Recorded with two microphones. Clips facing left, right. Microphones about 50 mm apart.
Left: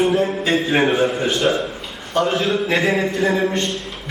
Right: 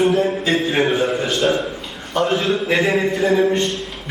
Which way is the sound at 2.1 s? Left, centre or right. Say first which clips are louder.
Even; centre.